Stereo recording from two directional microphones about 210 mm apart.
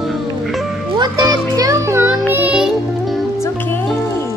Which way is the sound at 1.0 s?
15° right (ahead or behind).